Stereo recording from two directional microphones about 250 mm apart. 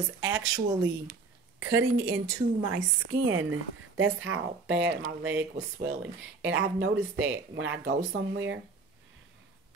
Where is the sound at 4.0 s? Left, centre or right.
Right.